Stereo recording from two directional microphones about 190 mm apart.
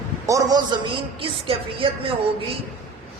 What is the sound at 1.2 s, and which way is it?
Speech, 30° right (ahead or behind).